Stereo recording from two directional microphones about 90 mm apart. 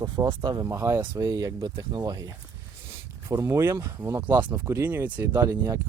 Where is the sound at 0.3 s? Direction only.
60° right (ahead or behind).